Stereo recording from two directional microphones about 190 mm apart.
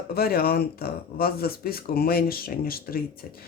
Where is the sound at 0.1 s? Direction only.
55° left (ahead or behind).